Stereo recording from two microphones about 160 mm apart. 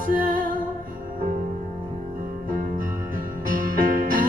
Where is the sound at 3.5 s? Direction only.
60° right (ahead or behind).